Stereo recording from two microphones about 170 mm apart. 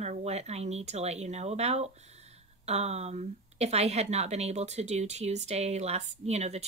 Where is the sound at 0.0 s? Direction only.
40° right (ahead or behind).